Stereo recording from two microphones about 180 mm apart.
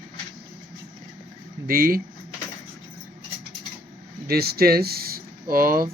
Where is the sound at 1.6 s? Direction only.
55° right (ahead or behind).